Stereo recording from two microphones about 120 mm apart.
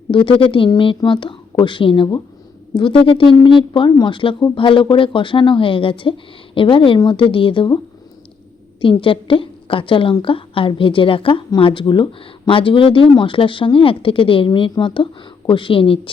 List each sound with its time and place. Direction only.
0.1 s a woman's voice: 45° left (ahead or behind)
8.8 s a woman's voice: 45° left (ahead or behind)